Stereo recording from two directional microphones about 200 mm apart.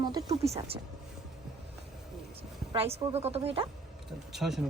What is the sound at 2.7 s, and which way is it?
Speech, 30° right (ahead or behind).